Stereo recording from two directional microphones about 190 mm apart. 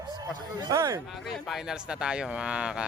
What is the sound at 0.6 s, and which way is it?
Speech, 20° right (ahead or behind).